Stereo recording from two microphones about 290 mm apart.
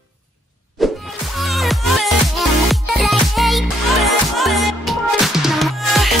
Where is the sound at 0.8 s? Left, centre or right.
Centre.